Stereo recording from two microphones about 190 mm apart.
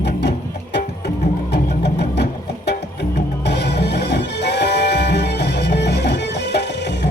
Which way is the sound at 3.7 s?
60° left (ahead or behind).